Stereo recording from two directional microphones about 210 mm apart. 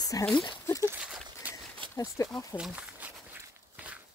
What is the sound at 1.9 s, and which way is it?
Speech, 15° left (ahead or behind).